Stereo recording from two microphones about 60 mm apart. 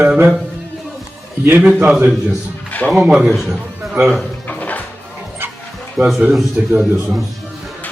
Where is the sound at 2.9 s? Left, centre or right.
Centre.